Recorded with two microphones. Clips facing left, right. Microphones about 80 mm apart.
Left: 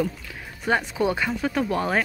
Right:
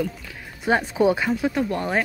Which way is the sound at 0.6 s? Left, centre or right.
Right.